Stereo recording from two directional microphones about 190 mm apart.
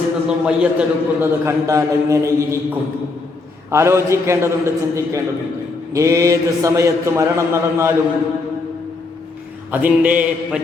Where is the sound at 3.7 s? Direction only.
15° right (ahead or behind).